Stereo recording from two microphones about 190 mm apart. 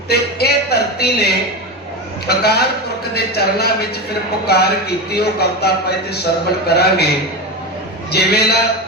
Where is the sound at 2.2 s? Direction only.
55° left (ahead or behind).